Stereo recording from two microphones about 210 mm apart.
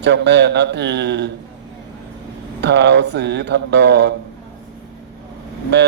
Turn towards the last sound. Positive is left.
turn(degrees=-55)  # may be behind; listen again after turning